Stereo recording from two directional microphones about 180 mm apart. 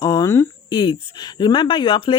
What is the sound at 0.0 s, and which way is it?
Speech, 20° left (ahead or behind).